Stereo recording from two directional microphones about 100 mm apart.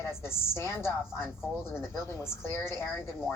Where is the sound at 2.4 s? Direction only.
25° left (ahead or behind).